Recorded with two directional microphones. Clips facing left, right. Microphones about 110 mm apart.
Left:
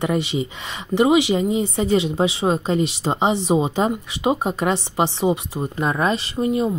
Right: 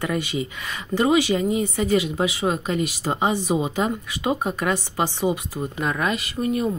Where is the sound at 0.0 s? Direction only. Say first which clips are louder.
Left 4 dB; 25° left (ahead or behind).